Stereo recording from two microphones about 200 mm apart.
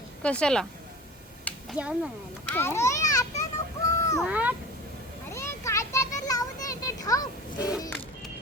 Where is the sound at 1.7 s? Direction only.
5° right (ahead or behind).